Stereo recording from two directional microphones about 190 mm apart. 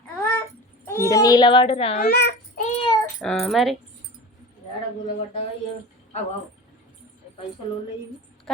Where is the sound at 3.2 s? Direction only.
5° left (ahead or behind).